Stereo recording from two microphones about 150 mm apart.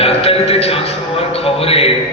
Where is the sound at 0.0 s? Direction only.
40° left (ahead or behind).